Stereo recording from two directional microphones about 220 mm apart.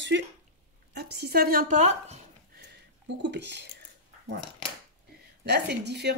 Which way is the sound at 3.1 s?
50° right (ahead or behind).